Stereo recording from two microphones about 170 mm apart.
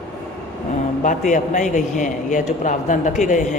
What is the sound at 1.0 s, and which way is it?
A man's voice, 45° left (ahead or behind).